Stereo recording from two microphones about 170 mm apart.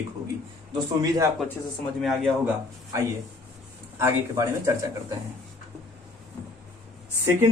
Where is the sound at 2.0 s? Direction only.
Centre (ahead or behind).